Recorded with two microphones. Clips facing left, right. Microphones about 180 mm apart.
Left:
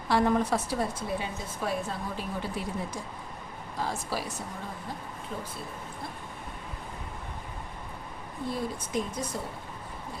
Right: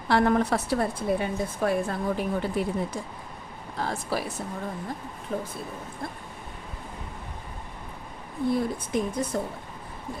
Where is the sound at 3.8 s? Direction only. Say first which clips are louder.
Right 3 dB; 60° right (ahead or behind).